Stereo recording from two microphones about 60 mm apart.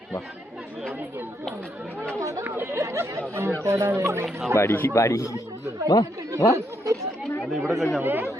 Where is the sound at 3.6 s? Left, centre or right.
Right.